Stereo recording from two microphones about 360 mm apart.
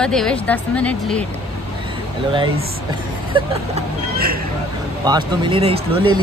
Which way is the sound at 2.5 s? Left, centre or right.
Right.